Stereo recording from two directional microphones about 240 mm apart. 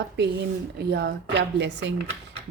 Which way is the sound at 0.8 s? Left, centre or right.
Right.